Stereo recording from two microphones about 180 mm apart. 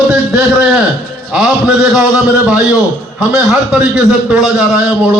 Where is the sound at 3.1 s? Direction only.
5° right (ahead or behind).